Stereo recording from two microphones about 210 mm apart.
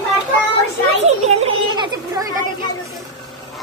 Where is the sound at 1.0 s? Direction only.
30° right (ahead or behind).